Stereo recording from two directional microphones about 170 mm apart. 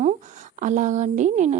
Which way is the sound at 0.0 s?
45° right (ahead or behind).